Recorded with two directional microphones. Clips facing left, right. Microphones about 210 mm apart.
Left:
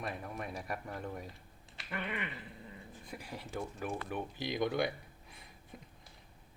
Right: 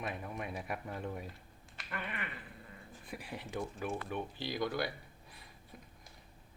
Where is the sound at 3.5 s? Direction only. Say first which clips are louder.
Right 1 dB; centre (ahead or behind).